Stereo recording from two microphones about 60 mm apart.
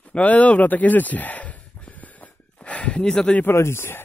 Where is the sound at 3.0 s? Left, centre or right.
Centre.